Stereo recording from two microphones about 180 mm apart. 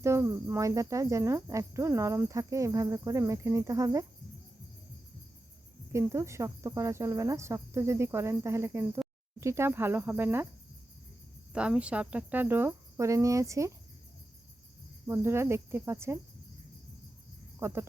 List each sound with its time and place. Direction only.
0.0 s cricket: 15° right (ahead or behind)
5.9 s cricket: 15° right (ahead or behind)
11.5 s cricket: 5° right (ahead or behind)
15.0 s cricket: 15° right (ahead or behind)
17.6 s cricket: 15° right (ahead or behind)